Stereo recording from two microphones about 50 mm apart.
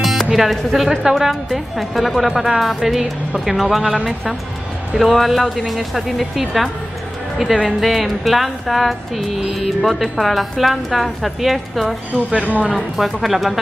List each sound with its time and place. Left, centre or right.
0.3 s speech: centre
0.7 s music: centre
3.8 s a woman's voice: centre
4.9 s music: centre
7.8 s music: centre
12.3 s a woman's voice: right
12.9 s music: centre